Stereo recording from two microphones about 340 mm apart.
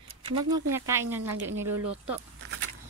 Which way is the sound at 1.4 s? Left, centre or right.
Right.